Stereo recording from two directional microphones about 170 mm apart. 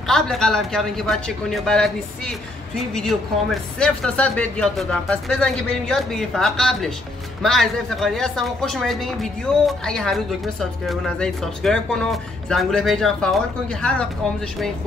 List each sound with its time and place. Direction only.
0.1 s speech: 5° left (ahead or behind)